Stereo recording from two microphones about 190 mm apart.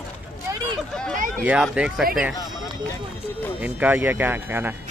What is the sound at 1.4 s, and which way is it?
Speech, 5° right (ahead or behind).